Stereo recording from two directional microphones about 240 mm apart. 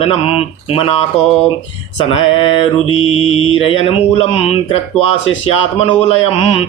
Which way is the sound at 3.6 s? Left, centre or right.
Left.